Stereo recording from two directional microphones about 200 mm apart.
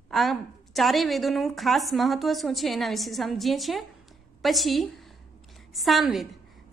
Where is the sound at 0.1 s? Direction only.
Centre (ahead or behind).